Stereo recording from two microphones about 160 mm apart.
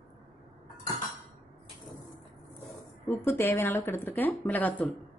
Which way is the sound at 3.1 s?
15° left (ahead or behind).